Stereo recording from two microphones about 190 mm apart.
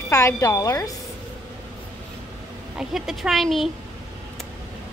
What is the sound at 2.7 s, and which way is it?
Speech, centre (ahead or behind).